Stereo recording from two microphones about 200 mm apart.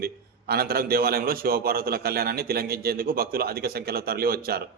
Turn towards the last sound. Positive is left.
turn(degrees=-50)  # may be behind; listen again after turning